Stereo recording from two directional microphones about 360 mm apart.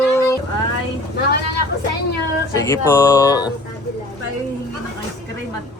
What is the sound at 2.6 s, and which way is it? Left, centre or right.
Speech, centre.